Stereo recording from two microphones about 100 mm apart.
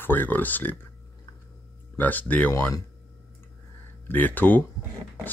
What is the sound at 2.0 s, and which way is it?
Speech, 15° left (ahead or behind).